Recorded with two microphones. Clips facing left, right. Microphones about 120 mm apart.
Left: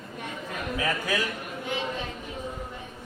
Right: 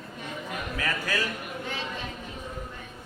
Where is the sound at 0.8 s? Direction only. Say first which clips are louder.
Left 3 dB; 20° left (ahead or behind).